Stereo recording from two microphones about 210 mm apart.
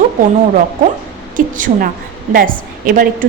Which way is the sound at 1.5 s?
40° right (ahead or behind).